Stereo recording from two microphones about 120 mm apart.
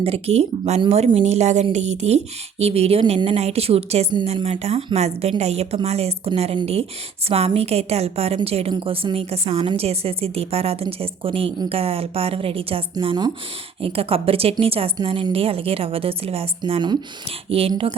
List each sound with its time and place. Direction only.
0.0 s a woman's voice: 55° right (ahead or behind); by 13.3 s 40° right (ahead or behind)
13.8 s a woman's voice: 55° right (ahead or behind)
17.7 s speech: 35° right (ahead or behind)